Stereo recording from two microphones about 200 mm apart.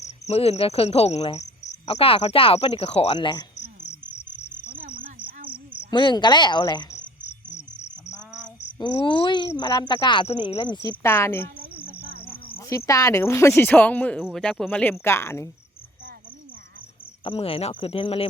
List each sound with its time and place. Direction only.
0.0 s cricket: 30° left (ahead or behind)
1.9 s speech: 30° left (ahead or behind)
4.9 s cricket: 45° right (ahead or behind)
5.9 s speech: 25° left (ahead or behind)
8.8 s speech: 25° left (ahead or behind)
10.8 s speech: 15° left (ahead or behind)
12.5 s speech: 15° left (ahead or behind)
17.2 s speech: 30° left (ahead or behind)